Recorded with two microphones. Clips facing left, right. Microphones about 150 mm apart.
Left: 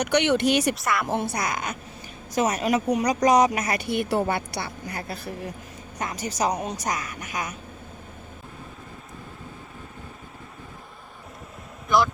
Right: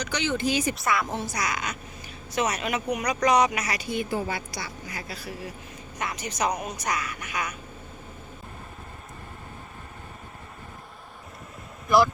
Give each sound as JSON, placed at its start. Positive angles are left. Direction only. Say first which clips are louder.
{"t": 0.0, "sound": "speech", "louder": "left 6 dB", "side_deg": 65}
{"t": 0.8, "sound": "a woman's voice", "louder": "even", "side_deg": 0}
{"t": 1.0, "sound": "a woman's voice", "louder": "left 4 dB", "side_deg": 60}
{"t": 6.0, "sound": "speech", "louder": "left 2 dB", "side_deg": 40}
{"t": 6.8, "sound": "speech", "louder": "left 1 dB", "side_deg": 45}